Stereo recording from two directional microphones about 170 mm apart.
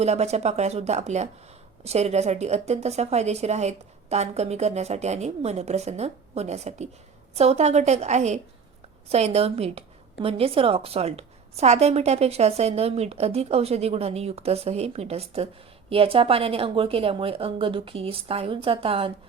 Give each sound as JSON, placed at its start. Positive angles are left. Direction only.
{"t": 0.0, "sound": "a woman's voice", "side_deg": -40}